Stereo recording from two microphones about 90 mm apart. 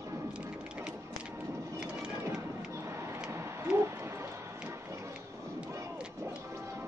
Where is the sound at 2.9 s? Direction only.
30° right (ahead or behind).